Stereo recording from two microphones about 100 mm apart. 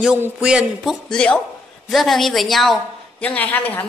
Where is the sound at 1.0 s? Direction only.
10° left (ahead or behind).